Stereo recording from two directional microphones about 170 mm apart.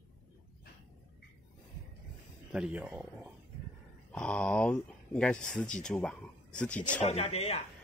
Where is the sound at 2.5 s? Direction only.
5° right (ahead or behind).